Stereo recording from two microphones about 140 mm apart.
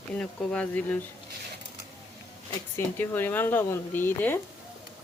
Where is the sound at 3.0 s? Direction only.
15° left (ahead or behind).